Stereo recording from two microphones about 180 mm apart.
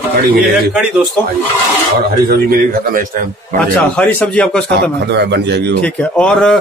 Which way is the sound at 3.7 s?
5° left (ahead or behind).